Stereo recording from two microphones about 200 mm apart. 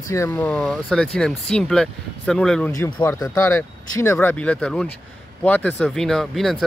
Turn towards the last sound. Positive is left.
turn(degrees=0)  # may be behind; listen again after turning